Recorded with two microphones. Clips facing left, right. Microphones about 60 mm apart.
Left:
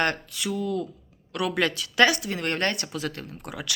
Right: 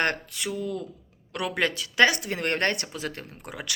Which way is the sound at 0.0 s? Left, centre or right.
Right.